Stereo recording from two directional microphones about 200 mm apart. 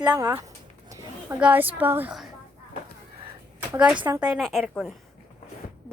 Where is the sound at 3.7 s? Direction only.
5° right (ahead or behind).